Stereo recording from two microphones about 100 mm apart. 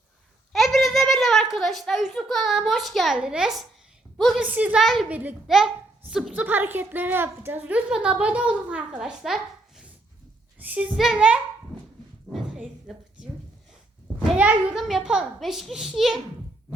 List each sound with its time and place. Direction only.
0.5 s a sound: centre (ahead or behind)
3.2 s a woman's voice: 5° right (ahead or behind)
4.8 s a child's voice: centre (ahead or behind)
5.0 s a woman's voice: 15° right (ahead or behind)
5.5 s a child's voice: 5° right (ahead or behind)
6.3 s a woman's voice: 20° right (ahead or behind)
10.6 s speech: 15° right (ahead or behind)
10.9 s a child's voice: 5° right (ahead or behind)
12.5 s a sound: 5° right (ahead or behind)
14.3 s a child's voice: 15° right (ahead or behind)
14.8 s a child's voice: centre (ahead or behind)